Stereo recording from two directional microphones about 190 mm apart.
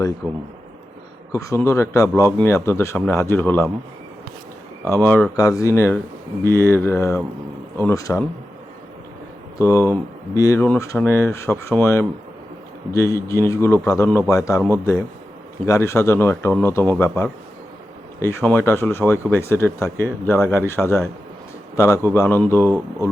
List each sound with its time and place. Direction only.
0.2 s a man's voice: 10° left (ahead or behind)
4.9 s a man's voice: 10° left (ahead or behind)
9.6 s a man's voice: 15° left (ahead or behind)
15.6 s a man's voice: 15° left (ahead or behind)